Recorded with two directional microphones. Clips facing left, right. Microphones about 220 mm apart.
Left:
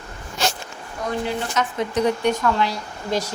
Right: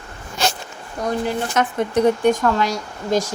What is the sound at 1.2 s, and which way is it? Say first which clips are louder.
Speech: right 3 dB; 50° right (ahead or behind).